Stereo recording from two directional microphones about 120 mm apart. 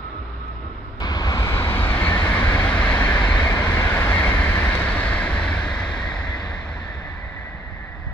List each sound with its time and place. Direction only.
1.0 s vehicle: 35° left (ahead or behind); by 3.4 s 10° left (ahead or behind)
3.4 s vehicle: 25° left (ahead or behind); by 6.2 s 5° left (ahead or behind)